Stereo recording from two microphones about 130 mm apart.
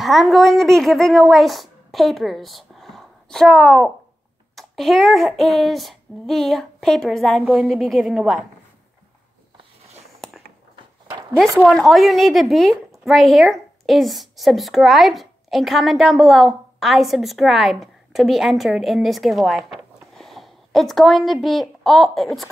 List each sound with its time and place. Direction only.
0.0 s speech: centre (ahead or behind)
4.6 s child singing: centre (ahead or behind)
11.1 s a sound: 35° right (ahead or behind)
11.3 s child singing: centre (ahead or behind)
13.0 s a woman's voice: centre (ahead or behind)